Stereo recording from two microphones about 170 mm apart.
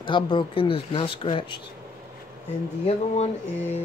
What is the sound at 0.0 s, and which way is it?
Speech, 30° left (ahead or behind).